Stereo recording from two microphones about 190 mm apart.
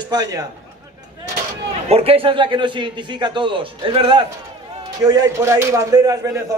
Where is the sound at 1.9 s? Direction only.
30° right (ahead or behind).